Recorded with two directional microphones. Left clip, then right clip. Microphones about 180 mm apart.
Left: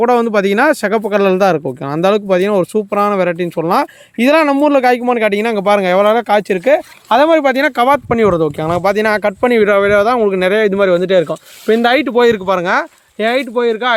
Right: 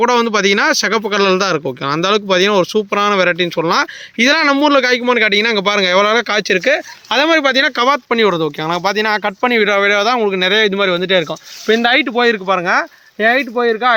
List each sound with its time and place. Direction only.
0.0 s speech: 50° left (ahead or behind)